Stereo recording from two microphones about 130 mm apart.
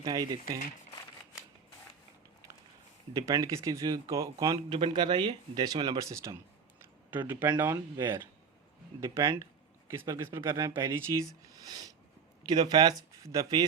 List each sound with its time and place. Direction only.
0.0 s speech: 30° right (ahead or behind)
3.1 s speech: 30° right (ahead or behind)
4.7 s speech: 40° right (ahead or behind)